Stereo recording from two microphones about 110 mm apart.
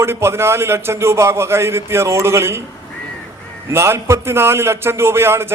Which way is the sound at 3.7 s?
25° right (ahead or behind).